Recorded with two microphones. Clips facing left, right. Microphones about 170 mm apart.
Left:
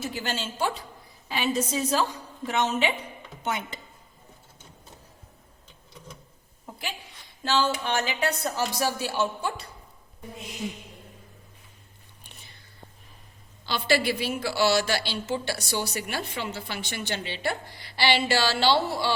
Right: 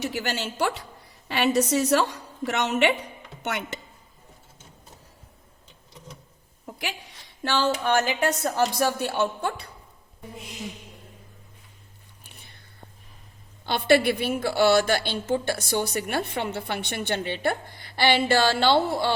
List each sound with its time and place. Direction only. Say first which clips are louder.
0.0 s a woman's voice: right 3 dB; 70° right (ahead or behind)
7.4 s speech: even; 60° right (ahead or behind)
7.7 s a woman's voice: right 5 dB; 45° right (ahead or behind)
13.7 s a woman's voice: right 5 dB; 55° right (ahead or behind)